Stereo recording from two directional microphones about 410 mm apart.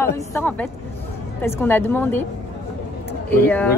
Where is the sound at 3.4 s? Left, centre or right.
Centre.